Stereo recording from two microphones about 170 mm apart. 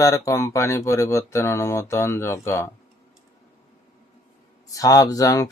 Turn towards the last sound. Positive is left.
turn(degrees=20)  # may be behind; listen again after turning